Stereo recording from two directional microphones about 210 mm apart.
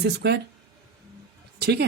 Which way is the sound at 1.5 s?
50° right (ahead or behind).